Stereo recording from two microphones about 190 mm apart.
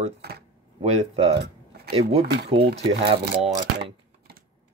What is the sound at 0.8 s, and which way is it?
Speech, 35° right (ahead or behind).